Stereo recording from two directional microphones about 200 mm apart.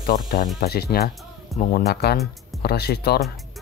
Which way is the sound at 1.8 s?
55° left (ahead or behind).